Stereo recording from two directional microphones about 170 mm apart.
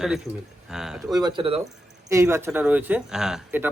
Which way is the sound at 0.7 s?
5° right (ahead or behind).